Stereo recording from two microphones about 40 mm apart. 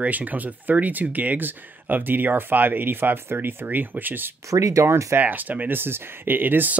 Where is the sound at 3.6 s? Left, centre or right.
Right.